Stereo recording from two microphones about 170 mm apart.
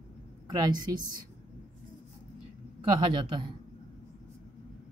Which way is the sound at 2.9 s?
30° right (ahead or behind).